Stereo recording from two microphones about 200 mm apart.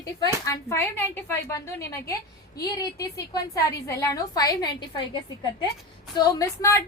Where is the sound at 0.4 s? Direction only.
15° left (ahead or behind).